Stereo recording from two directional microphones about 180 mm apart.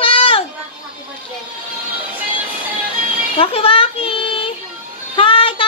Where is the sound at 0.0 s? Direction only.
30° left (ahead or behind).